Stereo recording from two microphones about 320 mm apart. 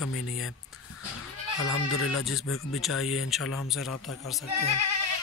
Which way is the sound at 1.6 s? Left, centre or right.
Left.